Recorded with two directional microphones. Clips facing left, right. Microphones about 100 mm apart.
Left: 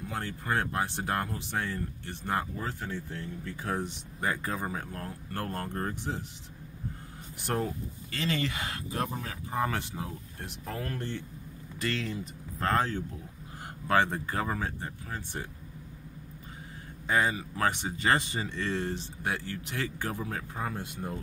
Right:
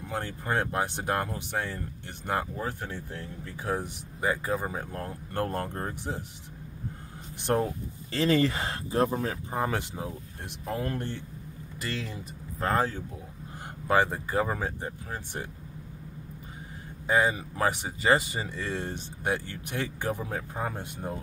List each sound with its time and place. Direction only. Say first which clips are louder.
0.1 s speech: right 2 dB; 20° right (ahead or behind); by 4.6 s 5° right (ahead or behind)
4.6 s speech: right 2 dB; 20° right (ahead or behind)
7.3 s speech: right 5 dB; 25° right (ahead or behind)
9.5 s speech: left 3 dB; 20° right (ahead or behind)
17.1 s speech: right 3 dB; 15° right (ahead or behind)